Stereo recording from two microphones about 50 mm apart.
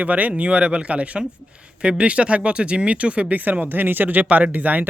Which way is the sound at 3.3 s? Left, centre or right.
Right.